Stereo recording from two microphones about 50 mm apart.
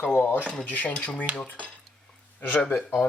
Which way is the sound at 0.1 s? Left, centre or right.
Left.